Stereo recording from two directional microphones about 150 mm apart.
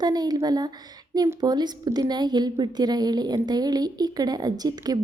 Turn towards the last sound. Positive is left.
turn(degrees=-25)  # may be behind; listen again after turning